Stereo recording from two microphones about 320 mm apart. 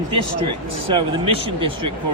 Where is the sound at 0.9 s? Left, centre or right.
Centre.